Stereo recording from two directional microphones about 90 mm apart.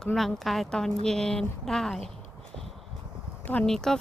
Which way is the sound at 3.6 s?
5° left (ahead or behind).